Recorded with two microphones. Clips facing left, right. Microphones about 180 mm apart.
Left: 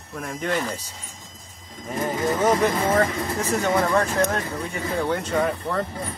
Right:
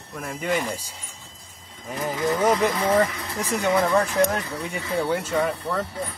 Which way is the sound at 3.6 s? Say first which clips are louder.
Right 2 dB; 15° right (ahead or behind).